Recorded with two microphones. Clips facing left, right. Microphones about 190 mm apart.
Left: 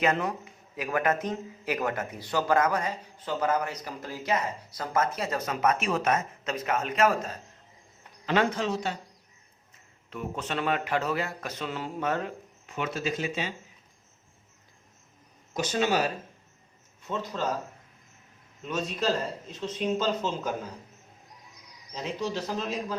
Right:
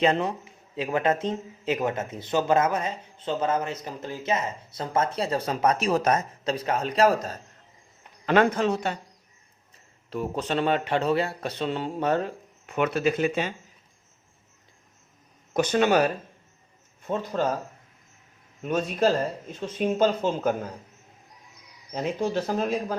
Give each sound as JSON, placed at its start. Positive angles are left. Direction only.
{"t": 0.0, "sound": "speech", "side_deg": -30}
{"t": 8.3, "sound": "speech", "side_deg": -55}
{"t": 10.1, "sound": "a man's voice", "side_deg": -35}
{"t": 12.6, "sound": "speech", "side_deg": -60}
{"t": 15.5, "sound": "speech", "side_deg": -60}
{"t": 18.6, "sound": "speech", "side_deg": -55}
{"t": 21.9, "sound": "speech", "side_deg": -50}